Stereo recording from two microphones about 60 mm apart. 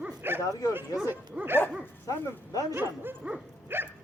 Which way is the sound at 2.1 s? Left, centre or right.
Left.